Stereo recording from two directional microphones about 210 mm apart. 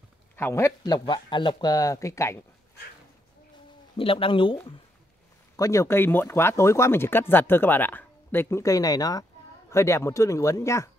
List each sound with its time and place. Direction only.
0.4 s speech: 10° left (ahead or behind)
3.9 s speech: 25° left (ahead or behind)
5.6 s speech: 15° left (ahead or behind)